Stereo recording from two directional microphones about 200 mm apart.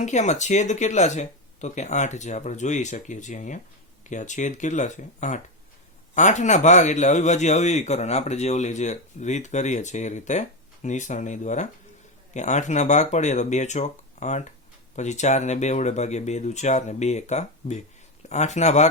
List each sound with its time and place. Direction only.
0.0 s a man's voice: 35° left (ahead or behind)